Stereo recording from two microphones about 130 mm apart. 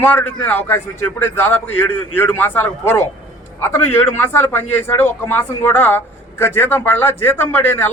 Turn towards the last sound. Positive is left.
turn(degrees=15)  # may be behind; listen again after turning